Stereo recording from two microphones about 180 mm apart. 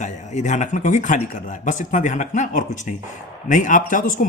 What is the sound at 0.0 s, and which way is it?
Speech, 40° left (ahead or behind).